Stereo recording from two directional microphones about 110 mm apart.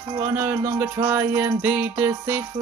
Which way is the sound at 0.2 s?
20° right (ahead or behind).